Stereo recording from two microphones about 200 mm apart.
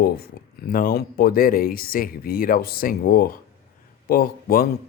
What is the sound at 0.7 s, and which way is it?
Speech, 45° left (ahead or behind).